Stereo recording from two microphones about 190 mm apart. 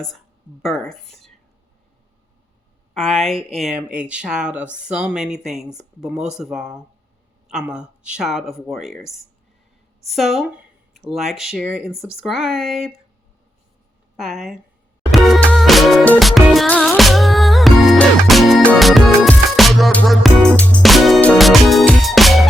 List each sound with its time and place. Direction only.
0.6 s speech: centre (ahead or behind)
2.9 s a woman's voice: centre (ahead or behind)
14.2 s speech: centre (ahead or behind)
15.1 s music: centre (ahead or behind)